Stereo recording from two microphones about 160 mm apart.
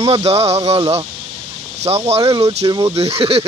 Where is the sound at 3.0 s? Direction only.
40° right (ahead or behind).